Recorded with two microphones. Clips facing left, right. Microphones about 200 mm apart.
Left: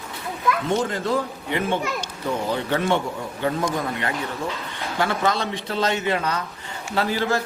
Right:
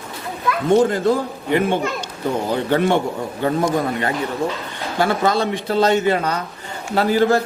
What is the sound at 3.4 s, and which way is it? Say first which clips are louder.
A man's voice: right 5 dB; 35° right (ahead or behind).